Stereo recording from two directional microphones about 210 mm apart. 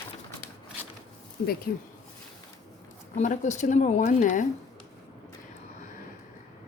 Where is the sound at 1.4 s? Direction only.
45° left (ahead or behind).